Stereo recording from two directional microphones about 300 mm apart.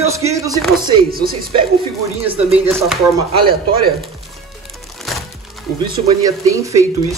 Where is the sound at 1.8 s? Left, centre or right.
Centre.